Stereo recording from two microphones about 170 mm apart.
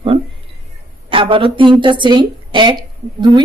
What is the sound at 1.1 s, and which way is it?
A woman's voice, 30° right (ahead or behind).